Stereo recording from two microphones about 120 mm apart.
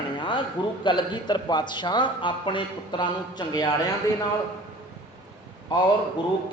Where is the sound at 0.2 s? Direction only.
40° left (ahead or behind).